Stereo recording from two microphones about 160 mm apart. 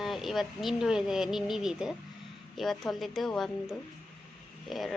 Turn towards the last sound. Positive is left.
turn(degrees=0)  # may be behind; listen again after turning